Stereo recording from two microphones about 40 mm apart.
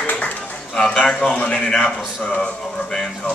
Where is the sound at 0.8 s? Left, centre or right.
Left.